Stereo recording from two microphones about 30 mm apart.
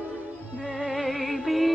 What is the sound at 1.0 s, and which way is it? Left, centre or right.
Music, centre.